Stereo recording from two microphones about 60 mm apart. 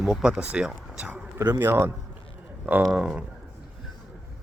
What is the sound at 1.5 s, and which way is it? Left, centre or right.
Speech, right.